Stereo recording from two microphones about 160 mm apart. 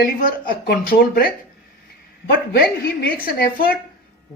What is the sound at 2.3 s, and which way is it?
Speech, 70° left (ahead or behind).